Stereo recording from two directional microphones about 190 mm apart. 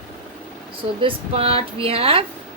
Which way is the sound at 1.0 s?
30° right (ahead or behind).